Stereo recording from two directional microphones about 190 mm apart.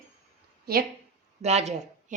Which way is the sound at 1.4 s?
35° right (ahead or behind).